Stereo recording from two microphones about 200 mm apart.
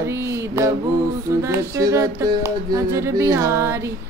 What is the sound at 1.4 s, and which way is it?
A man's voice, 15° right (ahead or behind).